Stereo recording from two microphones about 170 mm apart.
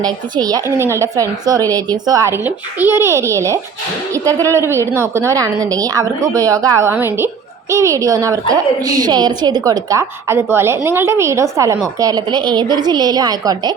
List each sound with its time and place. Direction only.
0.0 s a woman's voice: 20° right (ahead or behind)